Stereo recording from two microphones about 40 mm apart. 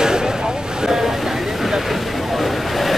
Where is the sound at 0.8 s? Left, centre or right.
Centre.